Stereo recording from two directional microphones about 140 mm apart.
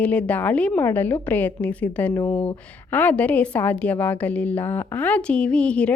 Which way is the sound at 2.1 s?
20° left (ahead or behind).